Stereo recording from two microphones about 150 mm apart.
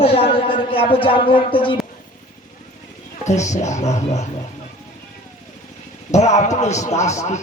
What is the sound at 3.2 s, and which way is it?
A man's voice, 50° left (ahead or behind).